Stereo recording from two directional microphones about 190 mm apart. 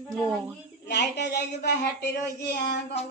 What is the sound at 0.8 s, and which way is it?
A woman's voice, 60° left (ahead or behind).